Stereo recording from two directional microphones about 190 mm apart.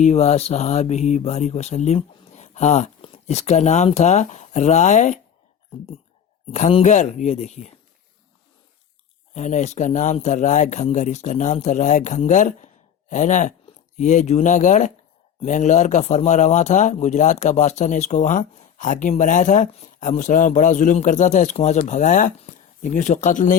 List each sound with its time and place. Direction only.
0.0 s speech: 35° left (ahead or behind)
6.5 s speech: 35° left (ahead or behind)
9.3 s speech: 40° left (ahead or behind)